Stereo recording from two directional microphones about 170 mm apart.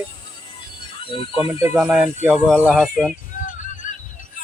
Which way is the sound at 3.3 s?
55° left (ahead or behind).